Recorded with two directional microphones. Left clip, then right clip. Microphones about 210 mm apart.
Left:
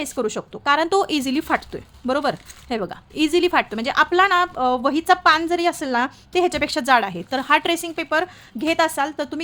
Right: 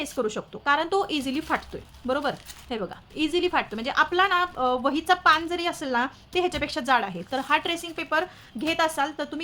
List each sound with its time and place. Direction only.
0.0 s speech: 35° left (ahead or behind)